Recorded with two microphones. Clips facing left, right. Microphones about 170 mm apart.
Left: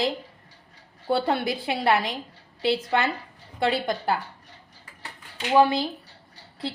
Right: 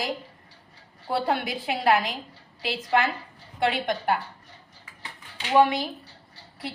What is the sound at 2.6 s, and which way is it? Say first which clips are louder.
Speech: left 1 dB; 25° left (ahead or behind).